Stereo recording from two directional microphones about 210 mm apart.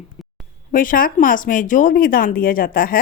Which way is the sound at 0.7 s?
40° left (ahead or behind).